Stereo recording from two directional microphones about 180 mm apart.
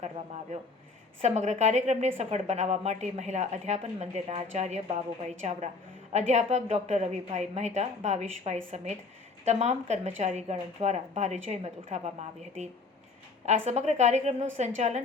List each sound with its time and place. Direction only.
1.2 s a woman's voice: 40° right (ahead or behind)
6.1 s a woman's voice: 40° right (ahead or behind)
13.4 s a woman's voice: 40° right (ahead or behind)